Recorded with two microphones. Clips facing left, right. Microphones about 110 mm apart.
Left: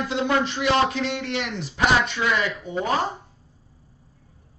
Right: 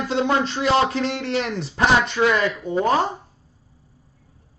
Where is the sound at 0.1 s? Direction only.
30° right (ahead or behind).